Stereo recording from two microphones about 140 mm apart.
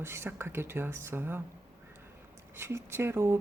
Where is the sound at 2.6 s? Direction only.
15° right (ahead or behind).